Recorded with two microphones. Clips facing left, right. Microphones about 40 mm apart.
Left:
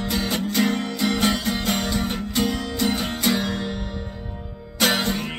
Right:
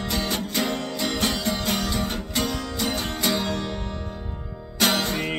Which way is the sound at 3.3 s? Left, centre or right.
Centre.